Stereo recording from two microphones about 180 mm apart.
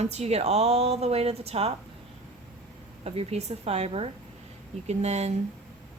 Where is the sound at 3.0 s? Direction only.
35° right (ahead or behind).